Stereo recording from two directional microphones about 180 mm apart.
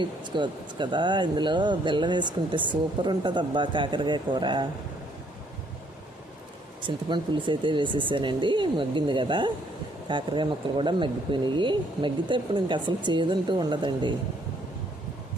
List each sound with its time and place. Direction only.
0.0 s speech: 25° right (ahead or behind)
6.8 s speech: 25° right (ahead or behind)